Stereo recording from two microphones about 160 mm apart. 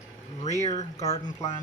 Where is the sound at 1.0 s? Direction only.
40° left (ahead or behind).